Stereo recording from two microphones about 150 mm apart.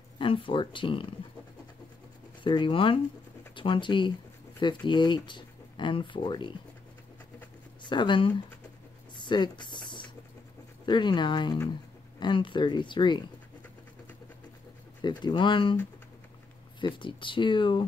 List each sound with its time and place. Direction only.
0.2 s speech: 35° left (ahead or behind)
2.4 s speech: 30° left (ahead or behind)
7.8 s speech: 30° left (ahead or behind)
9.1 s a sound: 30° left (ahead or behind)
10.9 s speech: 30° left (ahead or behind)
15.0 s speech: 30° left (ahead or behind)
16.8 s speech: 35° left (ahead or behind)